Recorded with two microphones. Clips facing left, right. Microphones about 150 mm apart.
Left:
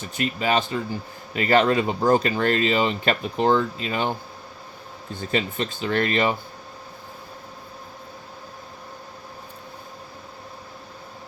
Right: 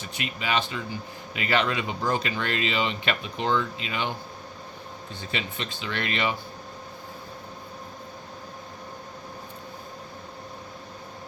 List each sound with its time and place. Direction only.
0.0 s speech: 45° left (ahead or behind)
5.3 s speech: 45° left (ahead or behind)